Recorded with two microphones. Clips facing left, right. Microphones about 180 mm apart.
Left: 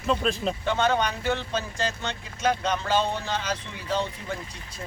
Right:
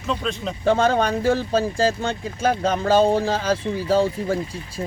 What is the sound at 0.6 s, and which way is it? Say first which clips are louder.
Speech: right 7 dB; 35° right (ahead or behind).